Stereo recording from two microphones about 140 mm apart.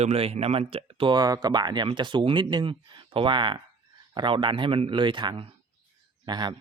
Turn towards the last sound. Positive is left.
turn(degrees=-30)  # may be behind; listen again after turning